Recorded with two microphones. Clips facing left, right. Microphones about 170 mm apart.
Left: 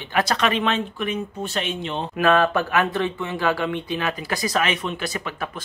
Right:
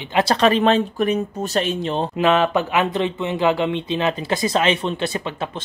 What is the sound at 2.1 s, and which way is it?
Speech, 20° right (ahead or behind).